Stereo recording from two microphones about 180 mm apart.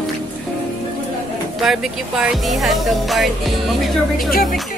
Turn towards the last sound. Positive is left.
turn(degrees=0)  # may be behind; listen again after turning